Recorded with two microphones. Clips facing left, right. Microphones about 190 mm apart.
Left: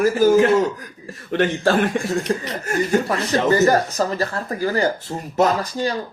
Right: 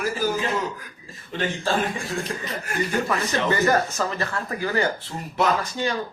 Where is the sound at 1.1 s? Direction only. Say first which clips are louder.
Left 8 dB; 70° left (ahead or behind).